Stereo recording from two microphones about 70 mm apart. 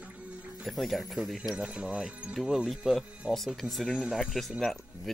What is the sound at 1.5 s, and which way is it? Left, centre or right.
Speech, centre.